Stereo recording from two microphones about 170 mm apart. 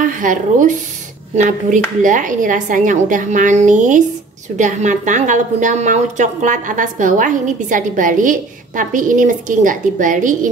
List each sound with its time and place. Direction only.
0.0 s a woman's voice: 50° right (ahead or behind)